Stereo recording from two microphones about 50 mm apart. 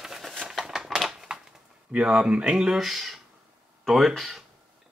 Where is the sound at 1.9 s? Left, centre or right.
Centre.